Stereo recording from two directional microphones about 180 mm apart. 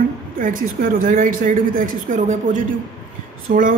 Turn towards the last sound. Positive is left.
turn(degrees=-60)  # may be behind; listen again after turning